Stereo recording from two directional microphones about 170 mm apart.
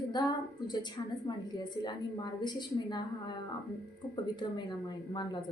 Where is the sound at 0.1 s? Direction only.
25° left (ahead or behind).